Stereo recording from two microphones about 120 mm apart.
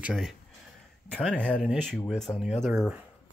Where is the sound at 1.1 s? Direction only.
10° left (ahead or behind).